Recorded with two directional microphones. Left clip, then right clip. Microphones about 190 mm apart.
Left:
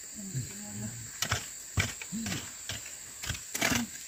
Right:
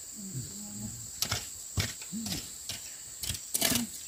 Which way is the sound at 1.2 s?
5° left (ahead or behind).